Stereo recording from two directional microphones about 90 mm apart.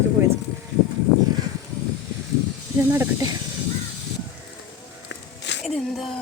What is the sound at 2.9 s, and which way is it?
Speech, 30° right (ahead or behind).